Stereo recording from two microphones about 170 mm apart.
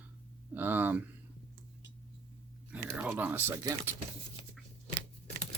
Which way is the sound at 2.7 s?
10° right (ahead or behind).